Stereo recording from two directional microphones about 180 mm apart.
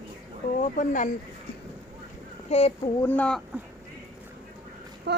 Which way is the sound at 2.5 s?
35° left (ahead or behind).